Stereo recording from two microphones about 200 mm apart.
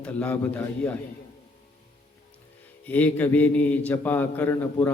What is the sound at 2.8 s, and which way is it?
A man's voice, 10° left (ahead or behind).